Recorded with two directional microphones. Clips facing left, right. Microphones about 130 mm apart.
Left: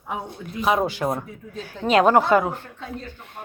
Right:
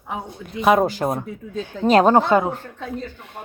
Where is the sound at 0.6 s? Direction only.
60° right (ahead or behind).